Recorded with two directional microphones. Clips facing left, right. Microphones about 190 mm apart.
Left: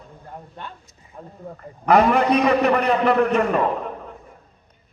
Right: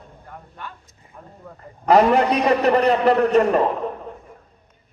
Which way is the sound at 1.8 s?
35° right (ahead or behind).